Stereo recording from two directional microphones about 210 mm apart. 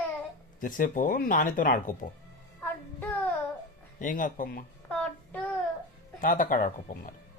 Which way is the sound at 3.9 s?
40° left (ahead or behind).